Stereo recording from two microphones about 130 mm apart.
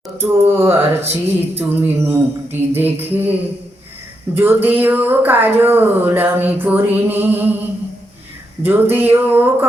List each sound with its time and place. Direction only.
0.2 s speech: 20° right (ahead or behind)
4.4 s speech: 15° right (ahead or behind)
8.6 s speech: 15° right (ahead or behind)